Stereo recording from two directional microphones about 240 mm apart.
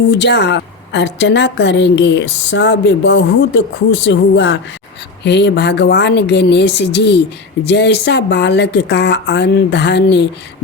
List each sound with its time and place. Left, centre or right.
0.1 s a woman's voice: left